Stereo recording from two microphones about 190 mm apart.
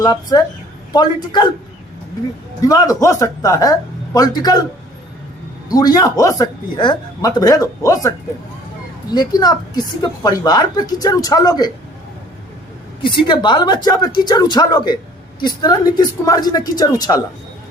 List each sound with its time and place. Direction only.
0.0 s a woman's voice: 20° left (ahead or behind)
2.6 s a woman's voice: 20° left (ahead or behind)
5.7 s a woman's voice: 20° left (ahead or behind)
13.1 s a woman's voice: 25° left (ahead or behind)